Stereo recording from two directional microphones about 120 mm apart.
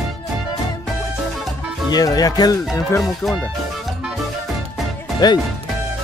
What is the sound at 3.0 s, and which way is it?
Speech, centre (ahead or behind).